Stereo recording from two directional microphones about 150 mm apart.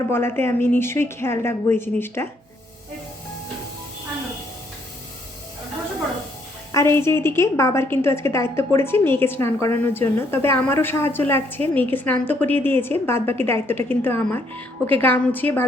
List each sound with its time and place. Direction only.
0.1 s a woman's voice: 15° left (ahead or behind)
6.7 s a woman's voice: 15° left (ahead or behind)